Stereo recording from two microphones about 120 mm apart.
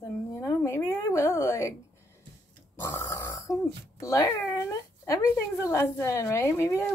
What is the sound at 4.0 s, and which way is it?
A woman's voice, 25° left (ahead or behind).